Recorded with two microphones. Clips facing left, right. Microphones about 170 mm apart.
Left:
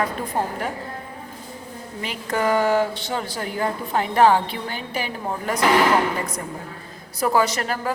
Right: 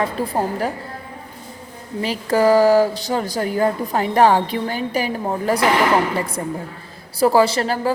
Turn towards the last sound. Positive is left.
turn(degrees=-30)  # may be behind; listen again after turning